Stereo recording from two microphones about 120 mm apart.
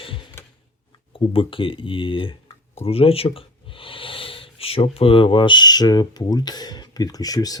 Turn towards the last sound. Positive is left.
turn(degrees=30)  # may be behind; listen again after turning